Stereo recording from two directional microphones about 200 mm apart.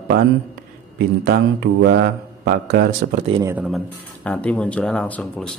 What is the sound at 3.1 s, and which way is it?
Speech, 30° right (ahead or behind).